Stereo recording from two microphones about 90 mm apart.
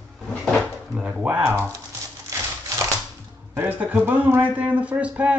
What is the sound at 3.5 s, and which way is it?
Speech, 20° right (ahead or behind).